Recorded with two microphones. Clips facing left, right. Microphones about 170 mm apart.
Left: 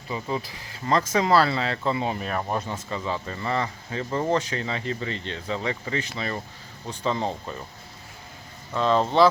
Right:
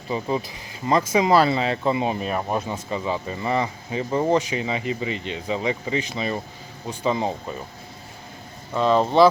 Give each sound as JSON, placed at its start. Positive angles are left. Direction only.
{"t": 0.1, "sound": "speech", "side_deg": -20}
{"t": 8.7, "sound": "speech", "side_deg": -10}